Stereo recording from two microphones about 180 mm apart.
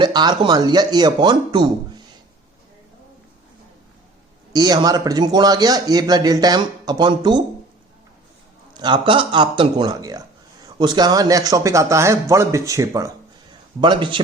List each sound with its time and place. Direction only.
0.0 s a man's voice: 25° right (ahead or behind)
4.5 s a man's voice: 20° right (ahead or behind)
8.7 s a man's voice: 25° right (ahead or behind)